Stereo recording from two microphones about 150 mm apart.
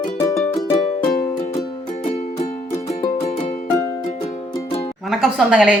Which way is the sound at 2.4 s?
50° left (ahead or behind).